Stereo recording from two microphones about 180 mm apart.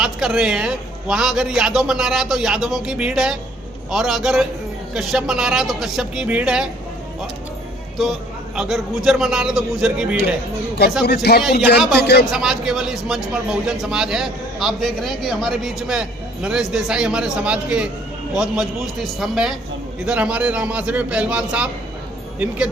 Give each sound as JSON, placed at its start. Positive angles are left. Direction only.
{"t": 0.0, "sound": "a man's voice", "side_deg": -5}
{"t": 7.9, "sound": "a man's voice", "side_deg": 0}
{"t": 11.0, "sound": "speech", "side_deg": 65}
{"t": 12.3, "sound": "a man's voice", "side_deg": 0}